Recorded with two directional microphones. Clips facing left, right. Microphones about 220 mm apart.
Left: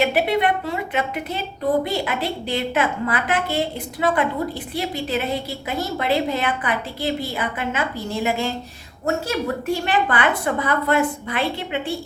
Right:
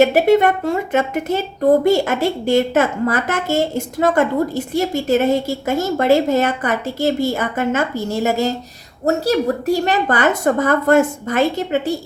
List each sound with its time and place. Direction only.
0.0 s a woman's voice: 45° right (ahead or behind)